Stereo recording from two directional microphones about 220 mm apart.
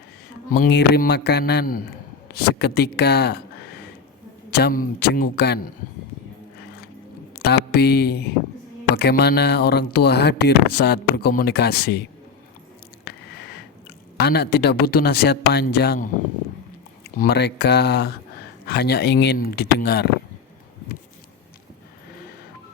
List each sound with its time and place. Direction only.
0.5 s speech: 45° left (ahead or behind)
4.5 s speech: 45° left (ahead or behind)
7.3 s speech: 45° left (ahead or behind)
13.1 s squish: 50° left (ahead or behind)
14.2 s speech: 45° left (ahead or behind)
17.2 s speech: 45° left (ahead or behind)